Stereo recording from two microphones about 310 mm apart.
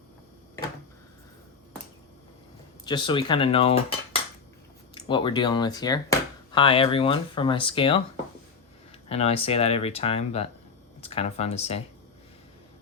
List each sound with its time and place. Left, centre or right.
2.8 s speech: centre
9.0 s speech: centre